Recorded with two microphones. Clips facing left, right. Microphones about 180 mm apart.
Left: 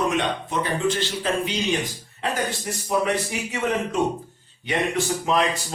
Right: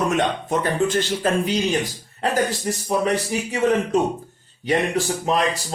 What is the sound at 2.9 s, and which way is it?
Speech, 35° right (ahead or behind).